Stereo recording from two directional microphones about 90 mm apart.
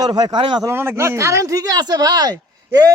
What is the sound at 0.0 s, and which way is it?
Speech, 50° right (ahead or behind).